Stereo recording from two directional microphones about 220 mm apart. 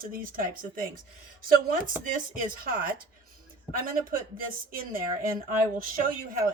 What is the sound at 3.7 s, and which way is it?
Speech, 40° right (ahead or behind).